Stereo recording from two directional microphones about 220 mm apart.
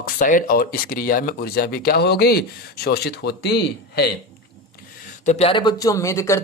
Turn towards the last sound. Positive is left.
turn(degrees=15)  # may be behind; listen again after turning